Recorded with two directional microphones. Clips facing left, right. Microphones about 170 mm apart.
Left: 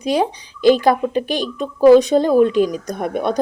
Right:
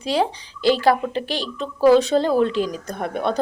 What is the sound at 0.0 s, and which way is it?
Speech, 15° left (ahead or behind).